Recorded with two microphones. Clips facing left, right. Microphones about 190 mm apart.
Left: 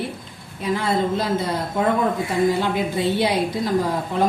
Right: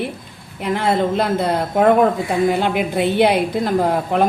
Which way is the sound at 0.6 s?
60° right (ahead or behind).